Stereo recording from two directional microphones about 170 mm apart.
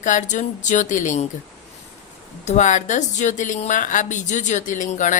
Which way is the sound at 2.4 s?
45° left (ahead or behind).